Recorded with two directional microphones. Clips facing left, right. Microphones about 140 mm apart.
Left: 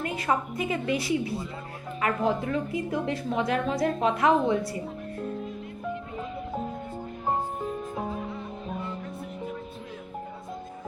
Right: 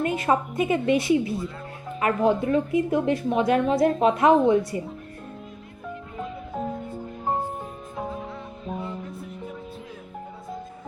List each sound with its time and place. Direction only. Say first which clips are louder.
0.0 s a woman's voice: right 5 dB; 25° right (ahead or behind)